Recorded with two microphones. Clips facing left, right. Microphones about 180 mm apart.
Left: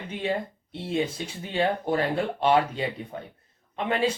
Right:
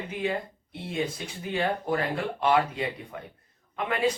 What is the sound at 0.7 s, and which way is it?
Speech, 30° left (ahead or behind).